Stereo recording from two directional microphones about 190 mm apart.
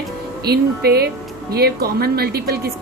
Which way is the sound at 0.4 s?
55° right (ahead or behind).